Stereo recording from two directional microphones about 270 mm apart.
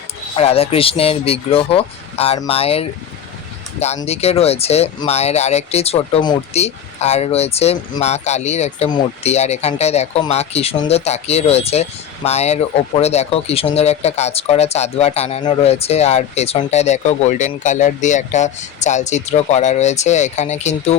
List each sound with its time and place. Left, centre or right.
0.3 s speech: left